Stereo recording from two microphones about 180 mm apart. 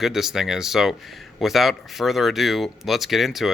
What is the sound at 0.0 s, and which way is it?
Speech, centre (ahead or behind).